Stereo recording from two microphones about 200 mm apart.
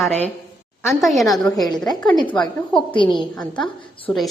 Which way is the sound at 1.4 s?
20° left (ahead or behind).